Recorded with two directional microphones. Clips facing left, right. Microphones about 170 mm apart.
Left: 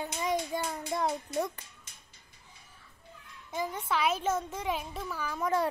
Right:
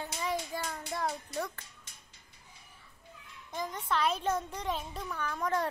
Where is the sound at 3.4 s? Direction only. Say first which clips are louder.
Left 2 dB; 10° left (ahead or behind).